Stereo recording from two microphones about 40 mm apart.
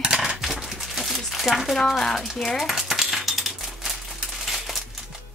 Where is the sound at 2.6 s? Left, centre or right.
Centre.